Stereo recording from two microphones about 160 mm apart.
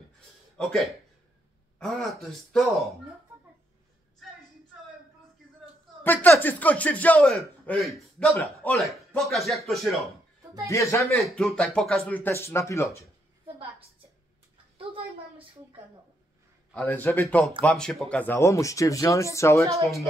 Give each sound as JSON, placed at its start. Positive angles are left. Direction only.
{"t": 0.6, "sound": "speech", "side_deg": 0}
{"t": 6.0, "sound": "a man's voice", "side_deg": 10}
{"t": 10.7, "sound": "speech", "side_deg": 20}
{"t": 11.2, "sound": "a man's voice", "side_deg": 0}
{"t": 14.8, "sound": "a woman's voice", "side_deg": -35}
{"t": 16.7, "sound": "a man's voice", "side_deg": 10}